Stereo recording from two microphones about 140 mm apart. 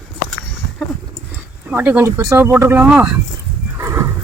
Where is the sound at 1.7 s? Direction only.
10° right (ahead or behind).